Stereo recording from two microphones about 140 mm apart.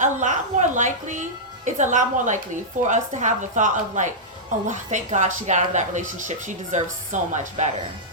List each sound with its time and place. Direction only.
0.0 s speech: 60° right (ahead or behind)